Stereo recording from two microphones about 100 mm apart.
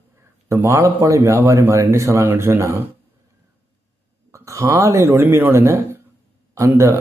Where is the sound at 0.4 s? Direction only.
25° right (ahead or behind).